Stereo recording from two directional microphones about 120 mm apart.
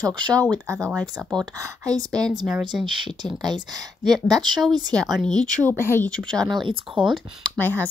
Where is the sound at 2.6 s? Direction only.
40° right (ahead or behind).